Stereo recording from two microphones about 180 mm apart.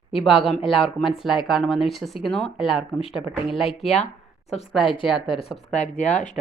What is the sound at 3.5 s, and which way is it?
Speech, centre (ahead or behind).